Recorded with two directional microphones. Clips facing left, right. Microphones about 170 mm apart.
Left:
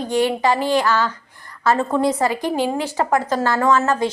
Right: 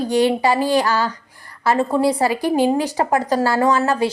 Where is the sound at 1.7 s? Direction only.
10° right (ahead or behind).